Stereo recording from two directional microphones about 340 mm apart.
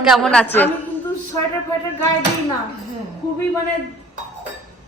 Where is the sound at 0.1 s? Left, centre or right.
Centre.